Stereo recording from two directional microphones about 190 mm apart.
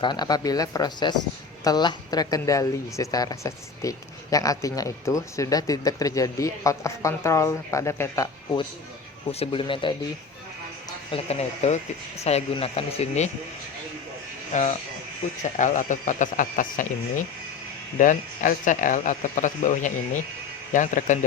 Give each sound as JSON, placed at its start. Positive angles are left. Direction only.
{"t": 0.0, "sound": "speech", "side_deg": 20}
{"t": 9.4, "sound": "speech", "side_deg": 25}
{"t": 11.1, "sound": "speech", "side_deg": 35}
{"t": 14.5, "sound": "speech", "side_deg": 40}